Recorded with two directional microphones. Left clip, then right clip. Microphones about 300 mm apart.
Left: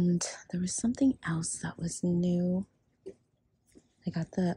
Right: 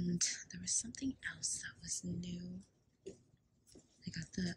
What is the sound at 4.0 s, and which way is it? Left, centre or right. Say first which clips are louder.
Speech: left 11 dB; centre.